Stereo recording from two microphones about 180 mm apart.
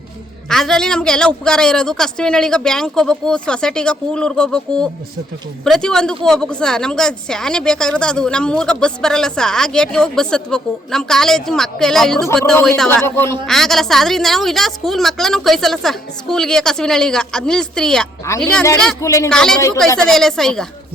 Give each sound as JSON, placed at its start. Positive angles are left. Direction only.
{"t": 0.5, "sound": "a woman's voice", "side_deg": 0}
{"t": 13.4, "sound": "a woman's voice", "side_deg": 0}
{"t": 19.0, "sound": "a man's voice", "side_deg": 15}
{"t": 19.3, "sound": "a woman's voice", "side_deg": 5}